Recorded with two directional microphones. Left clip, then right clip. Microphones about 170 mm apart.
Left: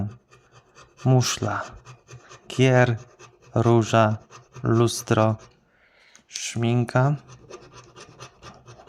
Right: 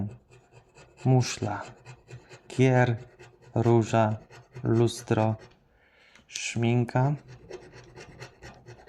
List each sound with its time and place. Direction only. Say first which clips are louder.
1.0 s speech: left 4 dB; 20° left (ahead or behind)
8.4 s rub: left 3 dB; 15° left (ahead or behind)